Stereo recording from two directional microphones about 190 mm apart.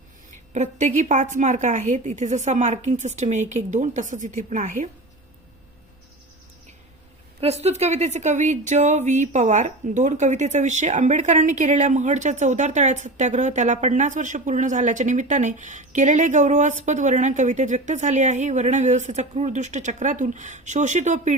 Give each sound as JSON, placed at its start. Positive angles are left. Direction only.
{"t": 0.5, "sound": "speech", "side_deg": -40}
{"t": 7.4, "sound": "speech", "side_deg": -35}